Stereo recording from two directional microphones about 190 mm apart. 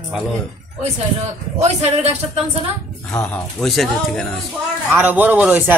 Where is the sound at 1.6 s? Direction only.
35° right (ahead or behind).